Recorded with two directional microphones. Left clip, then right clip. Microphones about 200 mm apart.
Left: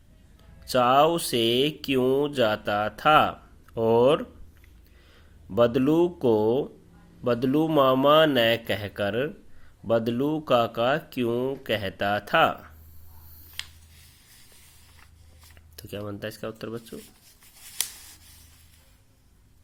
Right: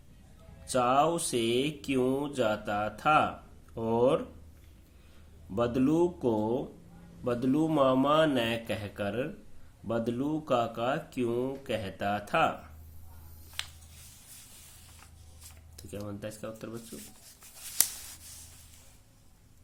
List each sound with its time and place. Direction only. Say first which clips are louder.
0.6 s speech: left 6 dB; 35° left (ahead or behind)
5.5 s speech: left 7 dB; 35° left (ahead or behind)
15.7 s speech: left 6 dB; 40° left (ahead or behind)